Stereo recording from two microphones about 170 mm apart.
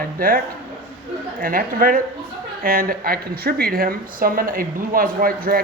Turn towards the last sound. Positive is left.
turn(degrees=-60)  # may be behind; listen again after turning